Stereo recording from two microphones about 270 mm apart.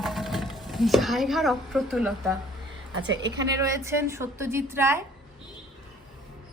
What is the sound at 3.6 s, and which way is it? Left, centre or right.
A woman's voice, centre.